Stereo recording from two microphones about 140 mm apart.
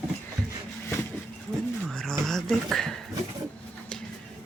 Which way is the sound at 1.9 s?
5° left (ahead or behind).